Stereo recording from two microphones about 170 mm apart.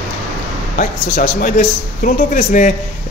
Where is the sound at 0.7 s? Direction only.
55° left (ahead or behind).